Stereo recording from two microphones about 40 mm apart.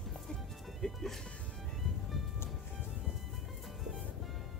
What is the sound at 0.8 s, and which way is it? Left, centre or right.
Speech, centre.